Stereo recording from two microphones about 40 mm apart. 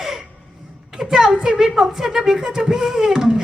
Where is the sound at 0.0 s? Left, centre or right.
Centre.